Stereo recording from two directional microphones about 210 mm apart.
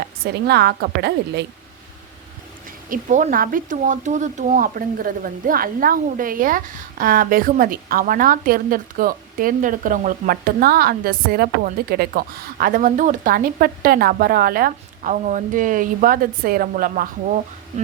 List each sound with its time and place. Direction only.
0.3 s a woman's voice: 50° right (ahead or behind)
2.9 s speech: 35° right (ahead or behind)